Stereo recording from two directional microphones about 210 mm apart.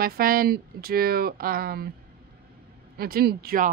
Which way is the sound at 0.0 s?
45° right (ahead or behind).